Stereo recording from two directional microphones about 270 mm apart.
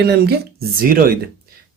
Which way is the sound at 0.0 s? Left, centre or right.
Right.